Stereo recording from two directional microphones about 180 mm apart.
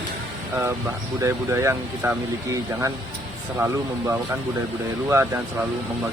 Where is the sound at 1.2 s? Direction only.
15° right (ahead or behind).